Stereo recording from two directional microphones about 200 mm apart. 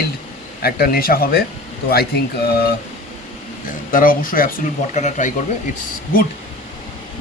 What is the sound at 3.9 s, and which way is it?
Speech, 45° left (ahead or behind).